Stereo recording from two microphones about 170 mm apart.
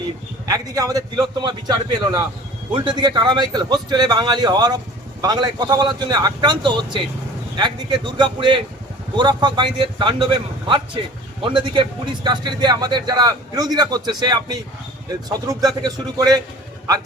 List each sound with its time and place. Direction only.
0.4 s a man's voice: 20° right (ahead or behind)